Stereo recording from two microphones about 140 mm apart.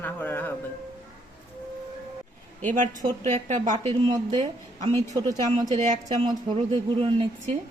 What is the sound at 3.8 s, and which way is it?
A woman's voice, 40° right (ahead or behind).